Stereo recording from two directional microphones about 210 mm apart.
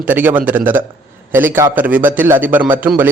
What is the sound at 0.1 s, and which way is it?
A man's voice, 10° right (ahead or behind).